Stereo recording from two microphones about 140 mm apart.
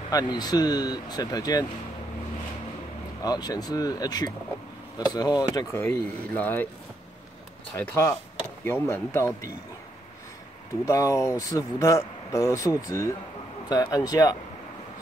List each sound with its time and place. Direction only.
0.1 s speech: 30° left (ahead or behind)
3.2 s speech: 30° left (ahead or behind); by 6.7 s 10° left (ahead or behind)
7.7 s speech: 20° left (ahead or behind)
10.9 s speech: 20° left (ahead or behind)